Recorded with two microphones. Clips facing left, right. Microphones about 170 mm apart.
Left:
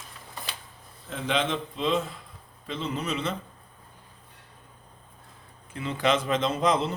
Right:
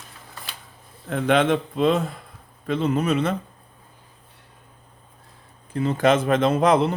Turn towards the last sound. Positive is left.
turn(degrees=-60)  # may be behind; listen again after turning